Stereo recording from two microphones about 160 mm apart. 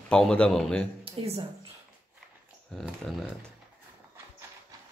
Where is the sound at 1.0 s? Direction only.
35° right (ahead or behind).